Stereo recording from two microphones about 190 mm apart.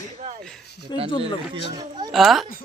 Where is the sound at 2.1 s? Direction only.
Centre (ahead or behind).